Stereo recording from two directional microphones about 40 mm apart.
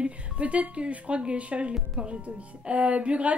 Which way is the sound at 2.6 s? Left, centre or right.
Right.